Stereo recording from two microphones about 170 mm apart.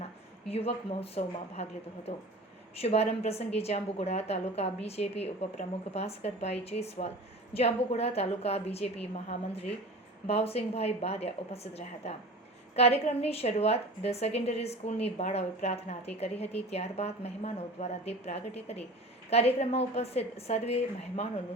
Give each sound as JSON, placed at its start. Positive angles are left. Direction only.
{"t": 0.4, "sound": "a woman's voice", "side_deg": 35}
{"t": 2.8, "sound": "a woman's voice", "side_deg": 35}